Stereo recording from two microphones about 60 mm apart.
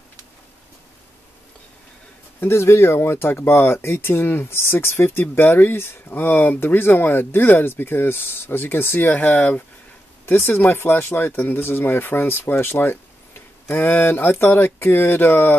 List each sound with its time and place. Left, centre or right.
2.4 s speech: left